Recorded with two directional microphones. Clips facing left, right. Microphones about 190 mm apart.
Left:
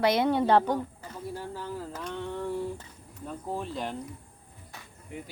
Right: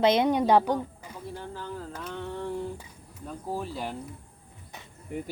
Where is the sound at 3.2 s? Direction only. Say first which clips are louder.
Right 1 dB; 5° right (ahead or behind).